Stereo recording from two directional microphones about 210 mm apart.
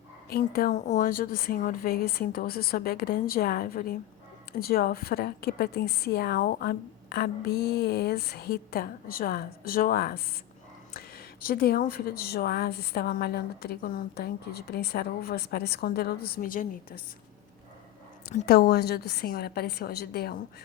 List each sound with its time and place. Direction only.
0.3 s speech: 45° left (ahead or behind)
18.3 s speech: 45° left (ahead or behind)